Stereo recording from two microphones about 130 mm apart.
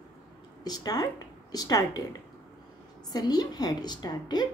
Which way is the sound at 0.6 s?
30° left (ahead or behind).